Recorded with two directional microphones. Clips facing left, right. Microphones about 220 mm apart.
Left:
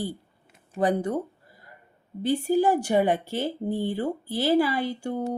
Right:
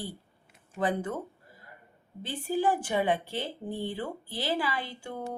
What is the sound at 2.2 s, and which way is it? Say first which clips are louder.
Speech: left 7 dB; 40° left (ahead or behind).